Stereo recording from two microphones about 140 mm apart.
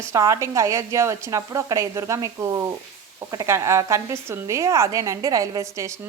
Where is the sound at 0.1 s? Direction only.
20° right (ahead or behind).